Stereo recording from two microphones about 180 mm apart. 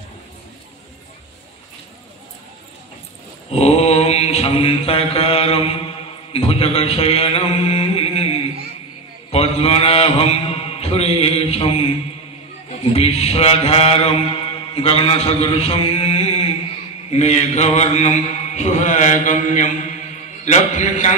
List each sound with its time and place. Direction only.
3.5 s mantra: 35° left (ahead or behind)
9.3 s mantra: 35° left (ahead or behind)